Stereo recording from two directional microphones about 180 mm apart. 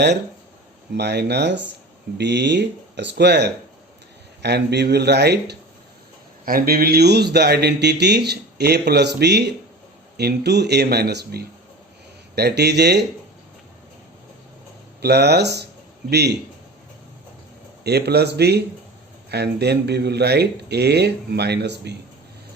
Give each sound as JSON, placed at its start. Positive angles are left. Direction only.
{"t": 0.9, "sound": "speech", "side_deg": -70}
{"t": 6.4, "sound": "speech", "side_deg": -55}
{"t": 15.0, "sound": "speech", "side_deg": -65}
{"t": 17.8, "sound": "speech", "side_deg": -65}